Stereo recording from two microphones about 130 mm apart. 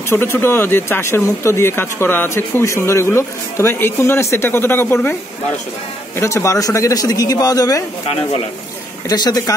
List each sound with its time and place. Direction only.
0.1 s speech: 20° left (ahead or behind)
6.1 s speech: 20° left (ahead or behind)
9.1 s speech: 30° left (ahead or behind)